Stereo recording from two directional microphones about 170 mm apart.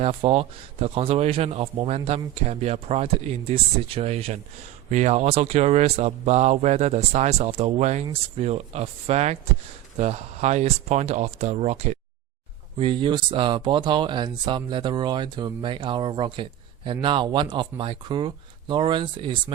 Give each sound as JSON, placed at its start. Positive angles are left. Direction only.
{"t": 0.0, "sound": "speech", "side_deg": -35}
{"t": 12.7, "sound": "speech", "side_deg": -30}